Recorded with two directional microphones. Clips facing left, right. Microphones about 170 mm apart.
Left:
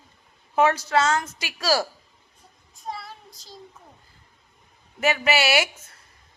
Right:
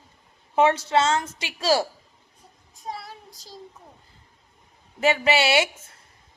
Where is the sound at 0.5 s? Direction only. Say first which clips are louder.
Right 1 dB; 25° right (ahead or behind).